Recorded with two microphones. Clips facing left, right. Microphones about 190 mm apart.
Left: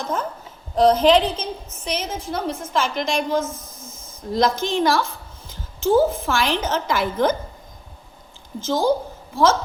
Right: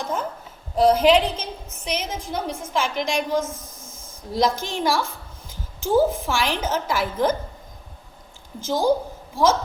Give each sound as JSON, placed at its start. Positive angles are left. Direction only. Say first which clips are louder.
{"t": 0.0, "sound": "a sound", "louder": "left 1 dB", "side_deg": -10}
{"t": 0.8, "sound": "a woman's voice", "louder": "left 1 dB", "side_deg": -10}
{"t": 8.6, "sound": "a woman's voice", "louder": "left 1 dB", "side_deg": -10}